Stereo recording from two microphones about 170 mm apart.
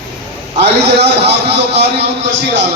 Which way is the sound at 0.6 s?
80° right.